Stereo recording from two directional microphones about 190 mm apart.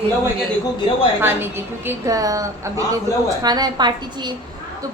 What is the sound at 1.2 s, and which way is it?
A woman's voice, 10° right (ahead or behind).